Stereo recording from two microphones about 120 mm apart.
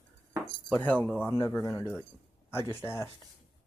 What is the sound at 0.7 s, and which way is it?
Speech, 15° left (ahead or behind).